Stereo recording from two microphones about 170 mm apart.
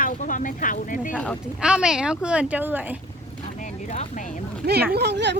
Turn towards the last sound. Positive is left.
turn(degrees=-90)